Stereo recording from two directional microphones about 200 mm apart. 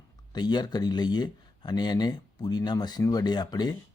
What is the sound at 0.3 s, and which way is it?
Speech, 20° left (ahead or behind).